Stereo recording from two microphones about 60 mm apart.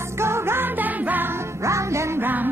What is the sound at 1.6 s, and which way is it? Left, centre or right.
Music, right.